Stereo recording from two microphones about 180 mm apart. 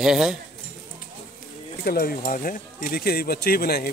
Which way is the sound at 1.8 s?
55° left (ahead or behind).